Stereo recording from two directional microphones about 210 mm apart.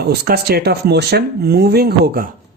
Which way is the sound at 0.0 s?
50° right (ahead or behind).